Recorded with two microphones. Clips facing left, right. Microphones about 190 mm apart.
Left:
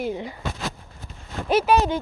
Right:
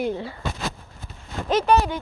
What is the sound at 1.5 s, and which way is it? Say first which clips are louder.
Speech: even; 10° left (ahead or behind).